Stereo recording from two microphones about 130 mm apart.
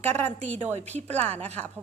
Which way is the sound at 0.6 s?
60° right (ahead or behind).